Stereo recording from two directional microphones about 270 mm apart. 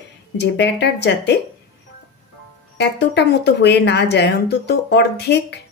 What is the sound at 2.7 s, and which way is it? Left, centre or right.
A woman's voice, left.